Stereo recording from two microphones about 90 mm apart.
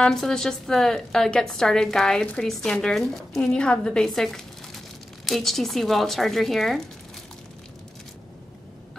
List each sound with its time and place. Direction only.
0.0 s a woman's voice: 5° left (ahead or behind)